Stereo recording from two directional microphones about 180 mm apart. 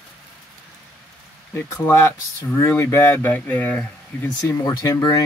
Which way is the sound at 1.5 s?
15° left (ahead or behind).